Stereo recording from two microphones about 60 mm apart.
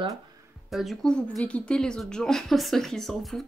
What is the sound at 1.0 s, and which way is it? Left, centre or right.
Speech, centre.